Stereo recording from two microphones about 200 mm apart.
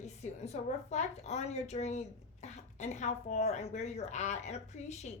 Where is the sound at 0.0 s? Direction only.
35° left (ahead or behind).